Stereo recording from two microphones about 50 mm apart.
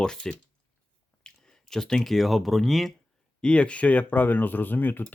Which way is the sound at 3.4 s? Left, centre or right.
Left.